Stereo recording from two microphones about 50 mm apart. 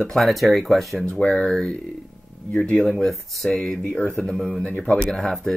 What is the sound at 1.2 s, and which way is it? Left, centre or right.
Speech, centre.